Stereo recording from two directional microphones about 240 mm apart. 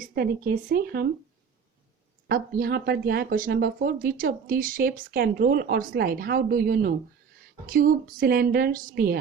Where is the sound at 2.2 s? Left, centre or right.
Right.